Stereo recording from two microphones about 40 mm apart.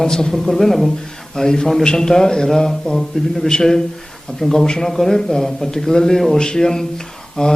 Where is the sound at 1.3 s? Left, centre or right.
Centre.